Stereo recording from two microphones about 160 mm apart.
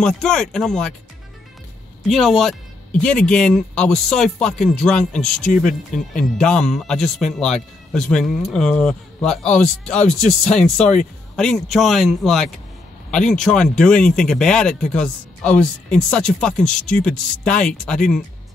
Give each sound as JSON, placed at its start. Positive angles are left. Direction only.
{"t": 0.0, "sound": "speech", "side_deg": 5}
{"t": 2.0, "sound": "speech", "side_deg": 0}